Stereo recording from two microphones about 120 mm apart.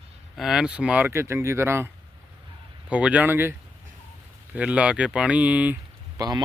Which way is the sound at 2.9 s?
10° right (ahead or behind).